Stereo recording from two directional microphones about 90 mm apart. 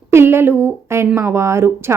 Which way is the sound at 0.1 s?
25° right (ahead or behind).